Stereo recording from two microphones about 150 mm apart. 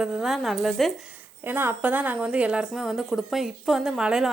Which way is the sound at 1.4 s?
10° right (ahead or behind).